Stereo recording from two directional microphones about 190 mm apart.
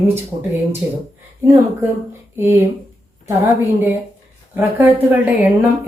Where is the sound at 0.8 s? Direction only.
10° right (ahead or behind).